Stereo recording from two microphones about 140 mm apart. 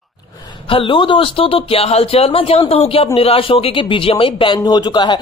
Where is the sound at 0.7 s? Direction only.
35° left (ahead or behind).